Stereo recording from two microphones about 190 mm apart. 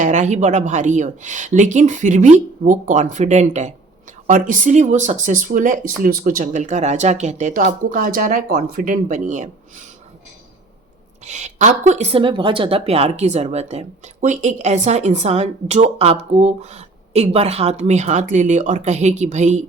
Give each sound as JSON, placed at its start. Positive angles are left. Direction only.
{"t": 0.0, "sound": "speech", "side_deg": -40}
{"t": 11.3, "sound": "speech", "side_deg": -40}